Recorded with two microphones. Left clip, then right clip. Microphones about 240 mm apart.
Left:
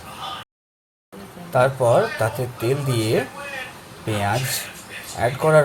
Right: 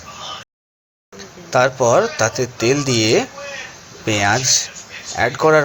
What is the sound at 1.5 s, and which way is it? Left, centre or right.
Speech, right.